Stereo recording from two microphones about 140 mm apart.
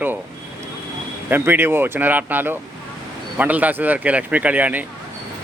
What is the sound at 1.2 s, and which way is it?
Speech, 15° right (ahead or behind).